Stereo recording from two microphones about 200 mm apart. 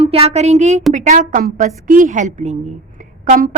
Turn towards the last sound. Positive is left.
turn(degrees=-45)  # may be behind; listen again after turning